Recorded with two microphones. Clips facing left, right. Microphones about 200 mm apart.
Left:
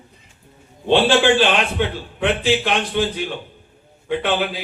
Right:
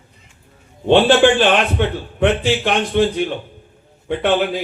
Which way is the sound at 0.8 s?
50° right (ahead or behind).